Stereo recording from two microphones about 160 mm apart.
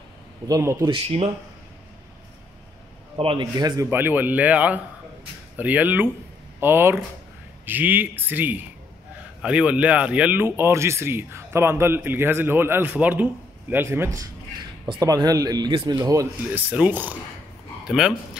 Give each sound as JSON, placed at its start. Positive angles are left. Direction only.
{"t": 0.5, "sound": "speech", "side_deg": -20}
{"t": 0.8, "sound": "speech", "side_deg": -35}
{"t": 3.2, "sound": "speech", "side_deg": -30}
{"t": 3.9, "sound": "speech", "side_deg": -10}